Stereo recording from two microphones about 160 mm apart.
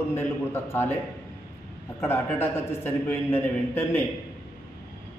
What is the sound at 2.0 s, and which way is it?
A man's voice, 15° left (ahead or behind).